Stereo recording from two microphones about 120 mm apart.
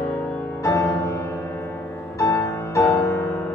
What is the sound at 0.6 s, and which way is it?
Music, 25° left (ahead or behind).